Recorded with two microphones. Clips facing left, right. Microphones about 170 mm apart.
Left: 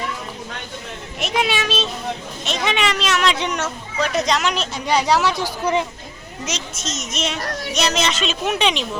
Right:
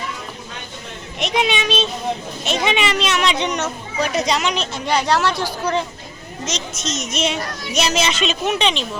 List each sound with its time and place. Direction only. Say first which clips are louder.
1.2 s a child's voice: right 1 dB; 5° left (ahead or behind)
5.0 s speech: even; 10° left (ahead or behind)
6.4 s speech: right 2 dB; 5° left (ahead or behind)